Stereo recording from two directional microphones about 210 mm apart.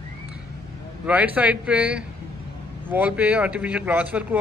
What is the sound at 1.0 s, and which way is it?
Speech, 5° right (ahead or behind).